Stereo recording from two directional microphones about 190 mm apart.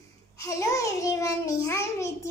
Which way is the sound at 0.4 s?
15° left (ahead or behind).